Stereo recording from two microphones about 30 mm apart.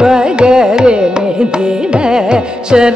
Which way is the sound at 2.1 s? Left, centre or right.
Right.